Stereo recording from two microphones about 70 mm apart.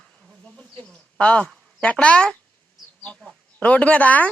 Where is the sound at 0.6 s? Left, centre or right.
Centre.